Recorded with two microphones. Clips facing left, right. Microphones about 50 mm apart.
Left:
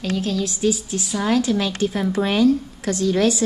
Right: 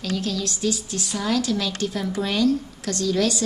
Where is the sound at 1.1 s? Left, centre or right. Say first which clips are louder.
Left 4 dB; left.